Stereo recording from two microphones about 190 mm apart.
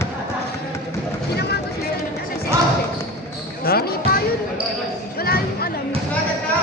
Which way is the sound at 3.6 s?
55° left (ahead or behind).